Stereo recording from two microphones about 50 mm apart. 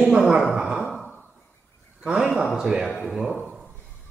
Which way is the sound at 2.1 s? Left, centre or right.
Centre.